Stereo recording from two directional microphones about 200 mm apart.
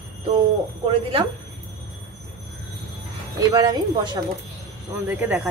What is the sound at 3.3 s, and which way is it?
Speech, 20° right (ahead or behind).